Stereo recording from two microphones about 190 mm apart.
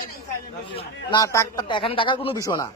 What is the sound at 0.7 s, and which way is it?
A man's voice, 20° left (ahead or behind).